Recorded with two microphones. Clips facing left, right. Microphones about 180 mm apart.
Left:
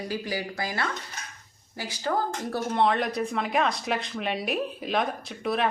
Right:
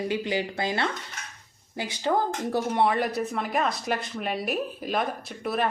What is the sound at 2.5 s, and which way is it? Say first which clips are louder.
Speech: even; 10° right (ahead or behind).